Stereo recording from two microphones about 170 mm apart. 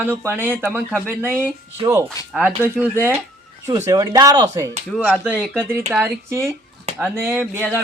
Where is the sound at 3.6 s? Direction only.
20° right (ahead or behind).